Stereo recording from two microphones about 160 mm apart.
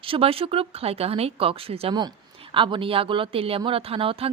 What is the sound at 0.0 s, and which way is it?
Speech, 35° right (ahead or behind).